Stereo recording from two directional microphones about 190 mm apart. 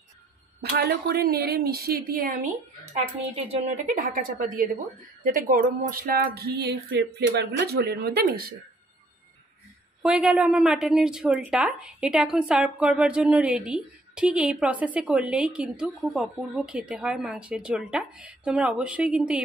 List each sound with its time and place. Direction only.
0.6 s a woman's voice: 55° right (ahead or behind)
3.3 s a woman's voice: 35° right (ahead or behind); by 8.5 s 55° right (ahead or behind)
10.0 s a woman's voice: 5° right (ahead or behind)